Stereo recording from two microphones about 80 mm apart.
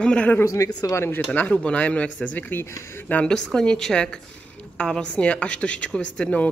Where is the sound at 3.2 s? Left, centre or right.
Centre.